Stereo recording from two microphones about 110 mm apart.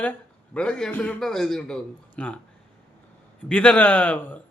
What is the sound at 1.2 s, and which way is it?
A man's voice, 5° left (ahead or behind).